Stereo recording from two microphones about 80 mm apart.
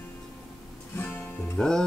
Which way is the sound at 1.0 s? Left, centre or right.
Left.